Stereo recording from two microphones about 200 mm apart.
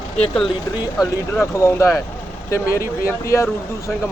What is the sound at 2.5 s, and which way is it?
Speech, 15° left (ahead or behind).